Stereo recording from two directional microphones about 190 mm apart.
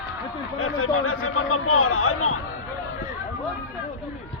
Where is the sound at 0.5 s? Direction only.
90° left.